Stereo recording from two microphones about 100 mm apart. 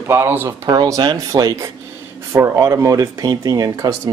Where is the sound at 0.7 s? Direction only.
45° right (ahead or behind).